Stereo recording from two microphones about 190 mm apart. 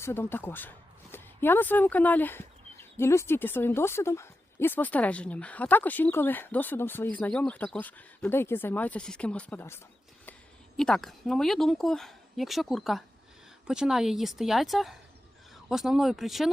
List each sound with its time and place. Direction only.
0.0 s speech: 10° left (ahead or behind)